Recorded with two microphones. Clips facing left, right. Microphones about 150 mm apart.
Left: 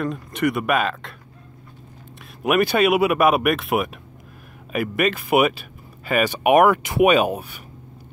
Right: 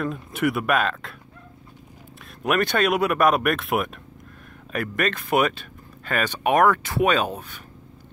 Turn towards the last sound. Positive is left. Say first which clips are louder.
# left 5 dB
turn(degrees=10)  # may be behind; listen again after turning